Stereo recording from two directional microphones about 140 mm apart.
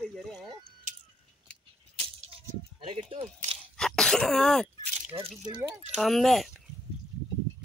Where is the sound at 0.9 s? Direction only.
70° right (ahead or behind).